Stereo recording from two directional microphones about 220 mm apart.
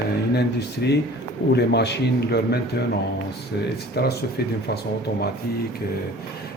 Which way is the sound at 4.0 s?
45° left (ahead or behind).